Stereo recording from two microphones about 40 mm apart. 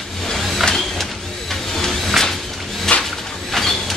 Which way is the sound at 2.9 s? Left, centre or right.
Centre.